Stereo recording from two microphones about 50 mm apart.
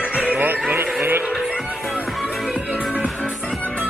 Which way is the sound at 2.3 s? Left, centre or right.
Centre.